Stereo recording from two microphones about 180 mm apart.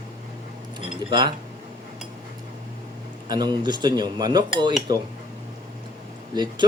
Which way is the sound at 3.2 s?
20° right (ahead or behind).